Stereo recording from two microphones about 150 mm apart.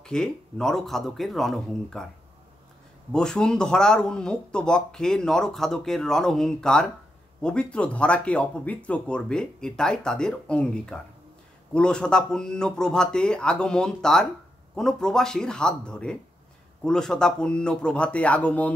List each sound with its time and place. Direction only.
0.0 s speech: 5° left (ahead or behind)
3.1 s speech: 5° left (ahead or behind)